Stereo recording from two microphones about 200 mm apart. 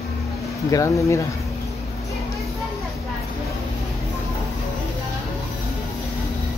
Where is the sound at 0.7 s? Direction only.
15° left (ahead or behind).